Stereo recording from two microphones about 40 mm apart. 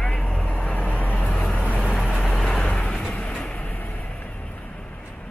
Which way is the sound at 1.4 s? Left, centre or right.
Left.